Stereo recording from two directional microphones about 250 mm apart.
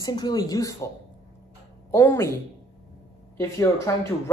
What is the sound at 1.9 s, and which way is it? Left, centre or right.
Speech, centre.